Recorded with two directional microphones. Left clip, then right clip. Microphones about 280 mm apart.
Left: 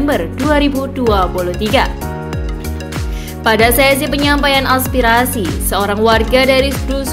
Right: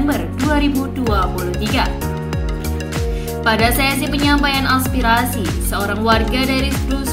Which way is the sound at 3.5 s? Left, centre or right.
Left.